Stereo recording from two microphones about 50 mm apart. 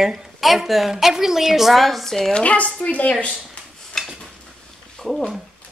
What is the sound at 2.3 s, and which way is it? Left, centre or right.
Speech, left.